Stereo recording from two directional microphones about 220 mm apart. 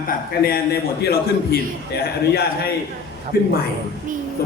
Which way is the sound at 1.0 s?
45° left (ahead or behind).